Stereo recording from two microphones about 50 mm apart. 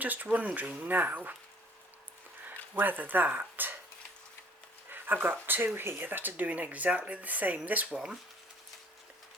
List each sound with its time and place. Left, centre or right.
0.0 s speech: right
2.4 s speech: right
4.9 s speech: right
7.9 s speech: centre